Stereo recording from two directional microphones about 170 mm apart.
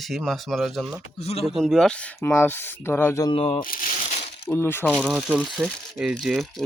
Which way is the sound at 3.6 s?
55° left (ahead or behind).